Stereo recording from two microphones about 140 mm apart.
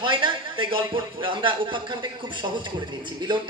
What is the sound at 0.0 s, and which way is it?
A man's voice, 35° right (ahead or behind).